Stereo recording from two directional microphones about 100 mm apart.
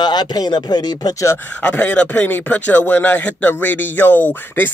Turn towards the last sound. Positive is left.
turn(degrees=20)  # may be behind; listen again after turning